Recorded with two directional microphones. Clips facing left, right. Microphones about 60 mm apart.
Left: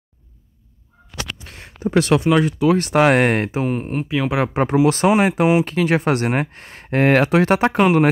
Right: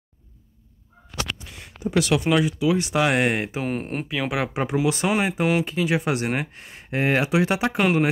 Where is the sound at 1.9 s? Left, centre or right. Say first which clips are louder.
Left 5 dB; left.